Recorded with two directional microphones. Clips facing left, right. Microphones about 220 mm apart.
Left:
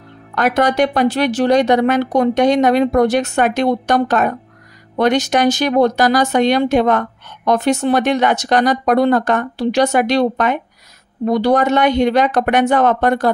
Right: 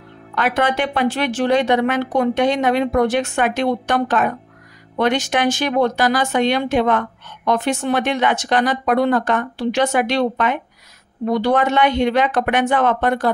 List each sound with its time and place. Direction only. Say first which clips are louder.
0.3 s speech: left 4 dB; 40° left (ahead or behind)